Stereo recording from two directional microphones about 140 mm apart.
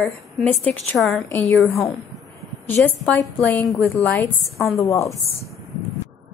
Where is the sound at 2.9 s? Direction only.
10° left (ahead or behind).